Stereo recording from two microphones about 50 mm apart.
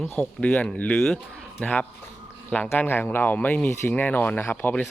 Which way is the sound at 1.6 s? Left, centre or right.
Left.